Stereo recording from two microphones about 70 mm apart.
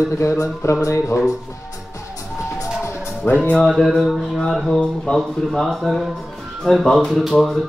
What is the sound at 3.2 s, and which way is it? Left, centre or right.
Music, left.